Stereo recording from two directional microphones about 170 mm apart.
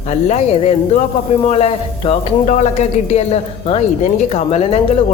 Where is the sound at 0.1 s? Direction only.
40° left (ahead or behind).